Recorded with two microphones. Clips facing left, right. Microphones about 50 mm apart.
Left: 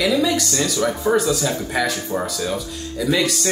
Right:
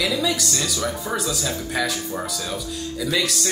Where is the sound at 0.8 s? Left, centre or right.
Left.